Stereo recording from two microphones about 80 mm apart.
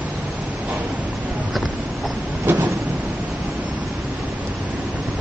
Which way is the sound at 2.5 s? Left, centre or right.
Right.